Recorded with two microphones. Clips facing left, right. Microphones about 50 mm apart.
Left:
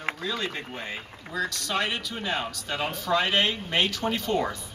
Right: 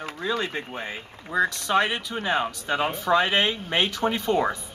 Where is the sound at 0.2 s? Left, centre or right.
Right.